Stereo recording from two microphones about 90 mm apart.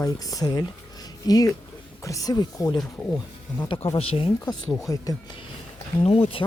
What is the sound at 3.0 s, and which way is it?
Speech, 20° left (ahead or behind).